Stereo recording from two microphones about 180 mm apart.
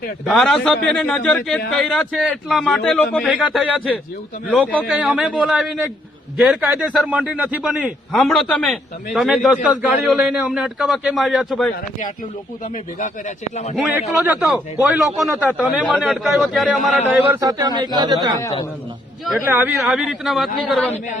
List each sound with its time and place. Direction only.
0.3 s speech: centre (ahead or behind)
3.3 s a man's voice: 5° right (ahead or behind)
4.6 s a man's voice: 5° left (ahead or behind)
12.7 s speech: 45° left (ahead or behind)
13.7 s speech: 5° right (ahead or behind)
17.1 s a man's voice: 15° right (ahead or behind)
19.2 s speech: 5° right (ahead or behind)